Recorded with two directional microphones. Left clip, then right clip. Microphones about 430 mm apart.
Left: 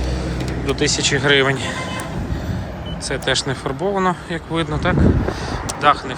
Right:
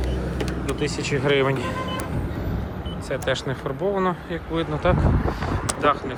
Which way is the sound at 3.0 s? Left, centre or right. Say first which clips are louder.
Left 5 dB; centre.